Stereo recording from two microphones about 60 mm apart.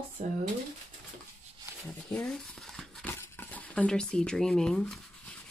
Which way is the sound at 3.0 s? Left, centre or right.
Left.